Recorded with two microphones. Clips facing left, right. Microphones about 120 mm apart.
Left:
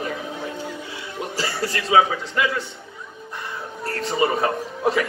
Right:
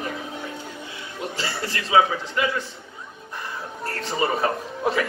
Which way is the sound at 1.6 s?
30° left (ahead or behind).